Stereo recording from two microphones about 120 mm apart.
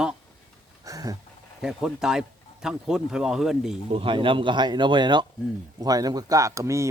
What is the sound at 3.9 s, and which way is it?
Speech, 45° right (ahead or behind).